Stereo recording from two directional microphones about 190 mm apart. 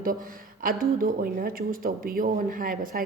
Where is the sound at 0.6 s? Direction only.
50° right (ahead or behind).